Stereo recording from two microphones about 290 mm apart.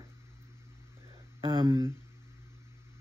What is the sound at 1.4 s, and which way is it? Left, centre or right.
Speech, centre.